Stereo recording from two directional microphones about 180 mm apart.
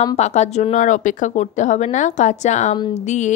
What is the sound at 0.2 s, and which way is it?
A woman's voice, 40° left (ahead or behind).